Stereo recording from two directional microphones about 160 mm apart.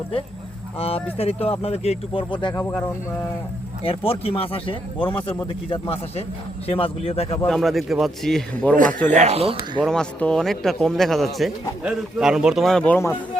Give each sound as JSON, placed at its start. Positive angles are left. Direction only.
{"t": 0.8, "sound": "speech", "side_deg": 40}
{"t": 2.6, "sound": "speech", "side_deg": 15}
{"t": 3.8, "sound": "speech", "side_deg": 35}
{"t": 7.4, "sound": "a man's voice", "side_deg": 0}
{"t": 9.0, "sound": "speech", "side_deg": -45}
{"t": 9.8, "sound": "a man's voice", "side_deg": 5}